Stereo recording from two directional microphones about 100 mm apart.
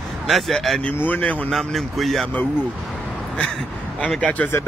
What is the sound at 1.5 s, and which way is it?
Speech, centre (ahead or behind).